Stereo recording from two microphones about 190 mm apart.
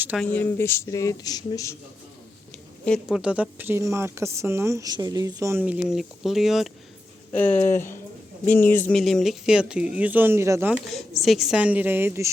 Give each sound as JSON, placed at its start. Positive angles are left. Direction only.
{"t": 0.3, "sound": "speech", "side_deg": 10}
{"t": 2.8, "sound": "speech", "side_deg": 0}
{"t": 7.3, "sound": "speech", "side_deg": 10}
{"t": 11.2, "sound": "speech", "side_deg": 0}